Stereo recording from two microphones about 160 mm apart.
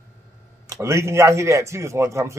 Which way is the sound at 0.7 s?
20° right (ahead or behind).